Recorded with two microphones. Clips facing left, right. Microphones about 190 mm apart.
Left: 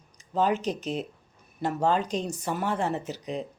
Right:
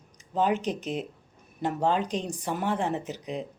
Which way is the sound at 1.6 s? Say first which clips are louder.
Left 1 dB; 15° right (ahead or behind).